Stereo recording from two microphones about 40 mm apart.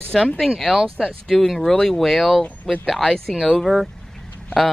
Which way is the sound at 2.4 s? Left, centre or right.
Left.